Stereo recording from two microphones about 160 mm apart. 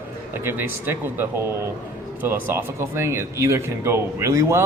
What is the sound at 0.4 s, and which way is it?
Speech, 10° right (ahead or behind).